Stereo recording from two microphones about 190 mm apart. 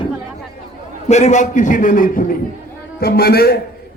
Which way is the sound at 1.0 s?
35° left (ahead or behind).